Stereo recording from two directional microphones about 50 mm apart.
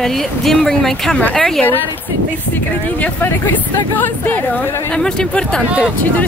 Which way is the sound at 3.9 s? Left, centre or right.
Left.